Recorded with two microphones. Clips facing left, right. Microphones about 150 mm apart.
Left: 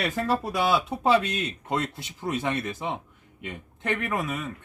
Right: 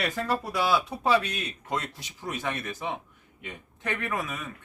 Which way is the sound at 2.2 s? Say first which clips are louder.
Left 4 dB; 20° left (ahead or behind).